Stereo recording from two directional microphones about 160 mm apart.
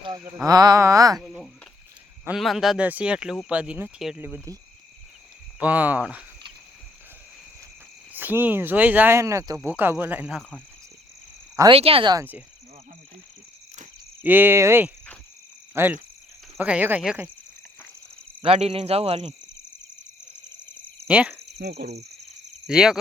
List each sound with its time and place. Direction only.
0.4 s a sound: 25° right (ahead or behind)
2.2 s speech: centre (ahead or behind)
5.5 s speech: 10° right (ahead or behind)
8.1 s speech: 10° right (ahead or behind)
11.7 s speech: 35° right (ahead or behind)
12.1 s speech: 15° right (ahead or behind)
14.2 s speech: 10° right (ahead or behind)
15.7 s cricket: 15° right (ahead or behind)
16.6 s speech: 10° right (ahead or behind)
18.4 s speech: 40° right (ahead or behind)
21.1 s speech: 5° right (ahead or behind)
21.6 s speech: 90° right
22.6 s speech: 5° right (ahead or behind)